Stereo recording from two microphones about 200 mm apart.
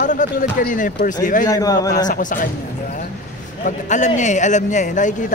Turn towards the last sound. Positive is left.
turn(degrees=40)  # may be behind; listen again after turning